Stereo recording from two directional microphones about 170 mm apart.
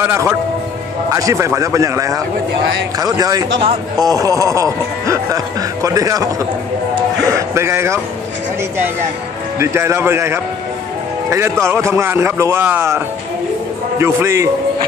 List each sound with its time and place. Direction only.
0.0 s a man's voice: 15° right (ahead or behind)
9.6 s a man's voice: 15° right (ahead or behind)